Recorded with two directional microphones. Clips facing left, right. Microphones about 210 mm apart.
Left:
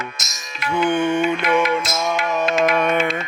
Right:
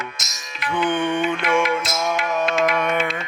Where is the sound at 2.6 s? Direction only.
30° left (ahead or behind).